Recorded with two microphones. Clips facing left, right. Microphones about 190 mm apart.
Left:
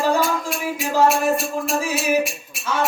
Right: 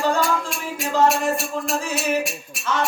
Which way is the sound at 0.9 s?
10° left (ahead or behind).